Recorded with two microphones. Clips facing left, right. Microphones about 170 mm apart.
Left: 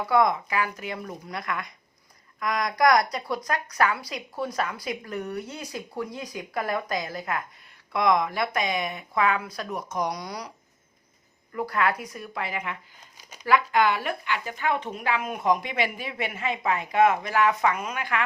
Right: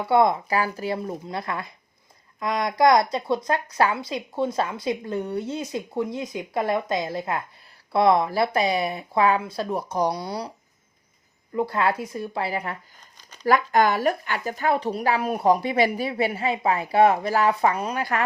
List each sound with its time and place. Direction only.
0.0 s speech: 30° right (ahead or behind)
11.5 s speech: 25° right (ahead or behind)